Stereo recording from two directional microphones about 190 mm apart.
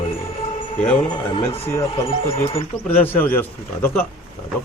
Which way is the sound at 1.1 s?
30° left (ahead or behind).